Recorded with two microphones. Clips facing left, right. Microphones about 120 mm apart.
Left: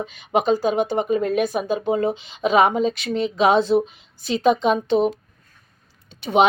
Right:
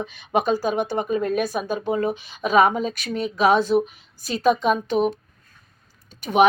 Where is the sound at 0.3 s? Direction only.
15° left (ahead or behind).